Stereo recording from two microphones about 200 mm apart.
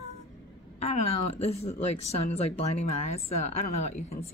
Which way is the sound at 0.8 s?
30° left (ahead or behind).